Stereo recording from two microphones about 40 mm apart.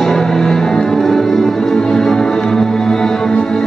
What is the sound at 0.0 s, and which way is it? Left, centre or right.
Music, centre.